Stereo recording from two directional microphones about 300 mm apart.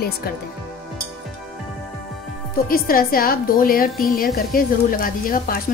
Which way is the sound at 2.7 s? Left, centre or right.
Left.